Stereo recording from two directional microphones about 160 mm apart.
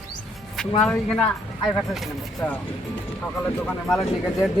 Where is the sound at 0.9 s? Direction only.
5° left (ahead or behind).